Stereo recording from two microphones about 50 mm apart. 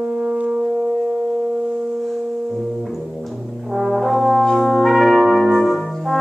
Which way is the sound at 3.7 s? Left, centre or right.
Centre.